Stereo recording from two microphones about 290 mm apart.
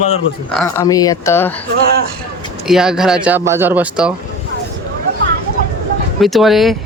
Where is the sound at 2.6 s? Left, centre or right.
Centre.